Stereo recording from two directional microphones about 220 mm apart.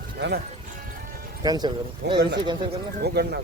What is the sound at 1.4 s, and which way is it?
Speech, 20° right (ahead or behind).